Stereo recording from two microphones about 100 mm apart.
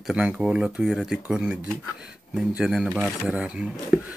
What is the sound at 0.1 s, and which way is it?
Speech, 10° right (ahead or behind).